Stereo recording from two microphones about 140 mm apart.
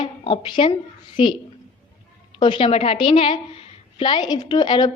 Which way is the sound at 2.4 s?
35° left (ahead or behind).